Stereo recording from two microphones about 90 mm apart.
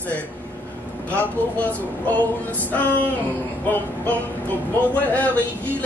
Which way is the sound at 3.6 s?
20° left (ahead or behind).